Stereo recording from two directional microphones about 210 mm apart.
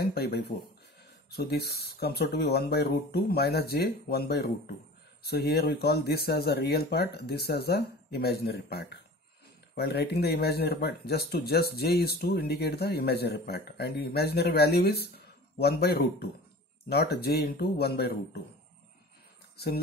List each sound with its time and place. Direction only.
0.0 s speech: 50° left (ahead or behind)
19.5 s speech: 50° left (ahead or behind)